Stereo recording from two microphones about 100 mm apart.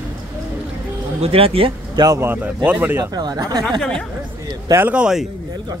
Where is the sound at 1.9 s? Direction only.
45° right (ahead or behind).